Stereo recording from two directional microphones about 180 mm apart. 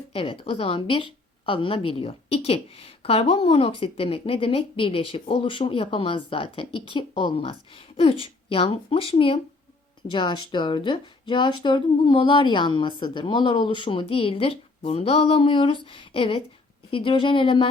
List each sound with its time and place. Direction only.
0.1 s a woman's voice: 30° left (ahead or behind)